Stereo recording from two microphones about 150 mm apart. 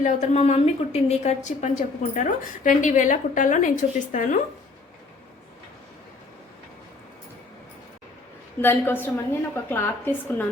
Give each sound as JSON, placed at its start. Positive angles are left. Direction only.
{"t": 0.0, "sound": "a woman's voice", "side_deg": 45}
{"t": 8.6, "sound": "a woman's voice", "side_deg": 15}